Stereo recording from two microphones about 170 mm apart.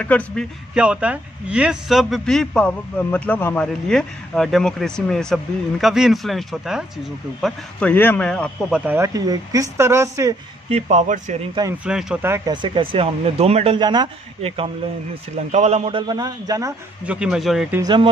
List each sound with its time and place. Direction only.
0.0 s a man's voice: 10° left (ahead or behind)
0.7 s speech: 5° right (ahead or behind)
7.4 s speech: 10° left (ahead or behind); by 10.3 s 20° right (ahead or behind)
10.7 s speech: 40° right (ahead or behind)
11.8 s speech: 5° right (ahead or behind)
12.6 s speech: 30° right (ahead or behind)
13.7 s a man's voice: 25° right (ahead or behind)
15.3 s a man's voice: 40° right (ahead or behind); by 16.7 s 20° right (ahead or behind)
17.0 s speech: 5° right (ahead or behind)
17.8 s a man's voice: 30° right (ahead or behind)